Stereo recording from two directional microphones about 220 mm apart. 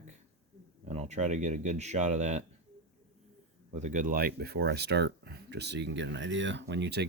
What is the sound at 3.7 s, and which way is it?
Speech, 35° right (ahead or behind).